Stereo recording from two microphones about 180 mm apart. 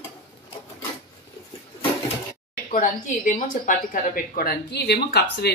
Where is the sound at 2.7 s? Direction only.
50° left (ahead or behind); by 5.5 s 65° left (ahead or behind).